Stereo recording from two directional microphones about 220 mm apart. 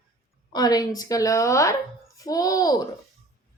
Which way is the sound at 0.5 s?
15° left (ahead or behind).